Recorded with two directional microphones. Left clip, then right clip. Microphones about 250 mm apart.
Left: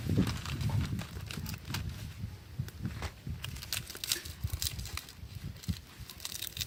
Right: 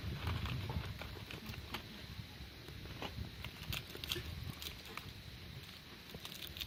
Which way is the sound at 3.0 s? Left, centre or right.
Centre.